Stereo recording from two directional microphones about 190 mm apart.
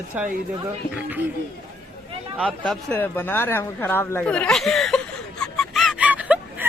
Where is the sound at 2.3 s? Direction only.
5° right (ahead or behind).